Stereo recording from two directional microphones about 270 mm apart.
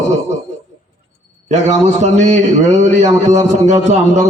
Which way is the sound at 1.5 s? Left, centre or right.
Right.